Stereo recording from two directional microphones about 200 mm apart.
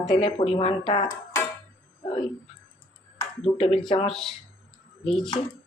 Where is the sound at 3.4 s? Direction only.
30° left (ahead or behind).